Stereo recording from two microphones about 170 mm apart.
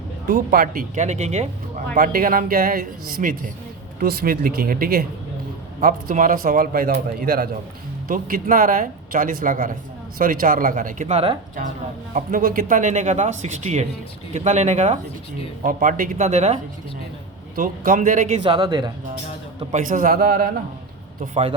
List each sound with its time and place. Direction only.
0.3 s speech: 55° right (ahead or behind); by 1.5 s 40° right (ahead or behind)
2.0 s speech: 55° right (ahead or behind); by 11.3 s 35° right (ahead or behind)
12.1 s speech: 55° right (ahead or behind)
17.5 s speech: 55° right (ahead or behind)
18.4 s speech: 30° right (ahead or behind)
19.7 s speech: 50° right (ahead or behind)
21.2 s a man's voice: 35° right (ahead or behind)